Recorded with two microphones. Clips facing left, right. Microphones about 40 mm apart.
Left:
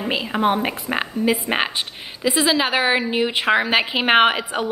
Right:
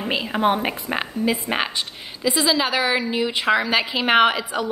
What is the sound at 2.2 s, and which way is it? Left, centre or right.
A woman's voice, left.